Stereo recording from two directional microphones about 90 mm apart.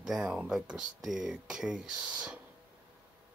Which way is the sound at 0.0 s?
5° right (ahead or behind).